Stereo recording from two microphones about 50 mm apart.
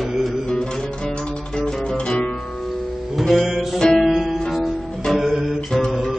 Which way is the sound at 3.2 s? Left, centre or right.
Centre.